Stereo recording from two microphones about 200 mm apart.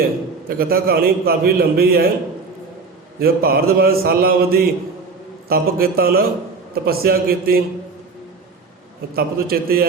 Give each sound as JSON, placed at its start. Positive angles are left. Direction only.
{"t": 0.4, "sound": "a man's voice", "side_deg": -50}
{"t": 3.2, "sound": "a man's voice", "side_deg": -50}
{"t": 9.1, "sound": "a man's voice", "side_deg": -50}